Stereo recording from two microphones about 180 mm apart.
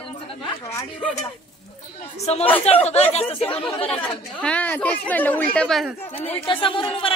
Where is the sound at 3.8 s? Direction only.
5° left (ahead or behind).